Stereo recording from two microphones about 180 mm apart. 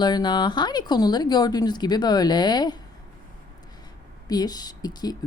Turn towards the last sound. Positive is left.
turn(degrees=20)  # may be behind; listen again after turning